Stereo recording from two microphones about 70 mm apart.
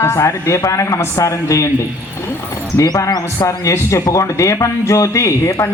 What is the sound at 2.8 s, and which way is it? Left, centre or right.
Speech, left.